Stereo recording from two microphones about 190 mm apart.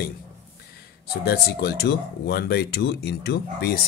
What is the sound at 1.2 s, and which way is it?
A man's voice, 55° left (ahead or behind).